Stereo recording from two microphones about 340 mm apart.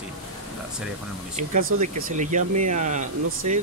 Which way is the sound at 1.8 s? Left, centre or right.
Right.